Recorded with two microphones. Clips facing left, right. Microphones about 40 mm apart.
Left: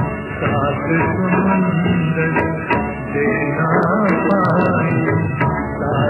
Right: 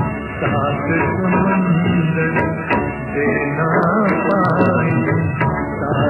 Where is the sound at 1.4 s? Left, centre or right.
Right.